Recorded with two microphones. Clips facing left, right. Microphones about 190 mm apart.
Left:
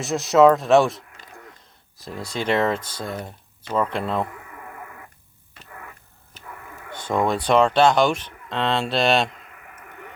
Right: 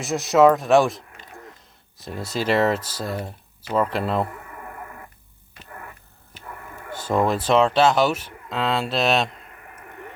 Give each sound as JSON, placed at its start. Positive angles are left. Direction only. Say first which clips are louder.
{"t": 0.0, "sound": "speech", "louder": "left 1 dB", "side_deg": 0}
{"t": 2.2, "sound": "speech", "louder": "right 1 dB", "side_deg": -5}
{"t": 6.9, "sound": "speech", "louder": "right 1 dB", "side_deg": -5}
{"t": 9.3, "sound": "a sound", "louder": "right 1 dB", "side_deg": -35}